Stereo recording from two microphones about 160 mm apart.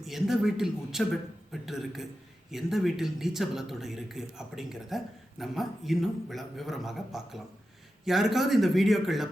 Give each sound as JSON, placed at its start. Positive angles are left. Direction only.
{"t": 0.0, "sound": "speech", "side_deg": 0}